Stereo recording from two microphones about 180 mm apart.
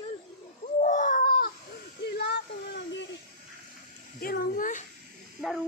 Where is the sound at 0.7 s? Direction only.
45° left (ahead or behind).